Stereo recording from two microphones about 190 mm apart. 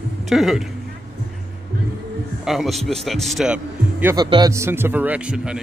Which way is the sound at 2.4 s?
Centre (ahead or behind).